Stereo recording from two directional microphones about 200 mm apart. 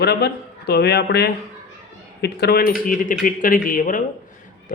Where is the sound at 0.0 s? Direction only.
55° left (ahead or behind).